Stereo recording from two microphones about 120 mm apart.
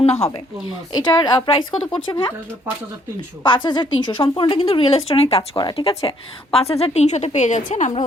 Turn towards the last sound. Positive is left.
turn(degrees=90)